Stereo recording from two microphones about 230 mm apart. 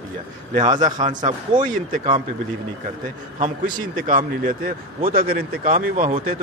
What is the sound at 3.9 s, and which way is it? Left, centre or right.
Speech, right.